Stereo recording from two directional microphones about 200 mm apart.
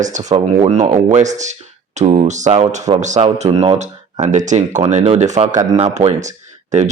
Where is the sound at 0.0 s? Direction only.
35° right (ahead or behind).